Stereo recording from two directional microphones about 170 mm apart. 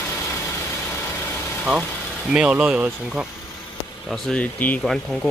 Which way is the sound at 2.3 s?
5° right (ahead or behind).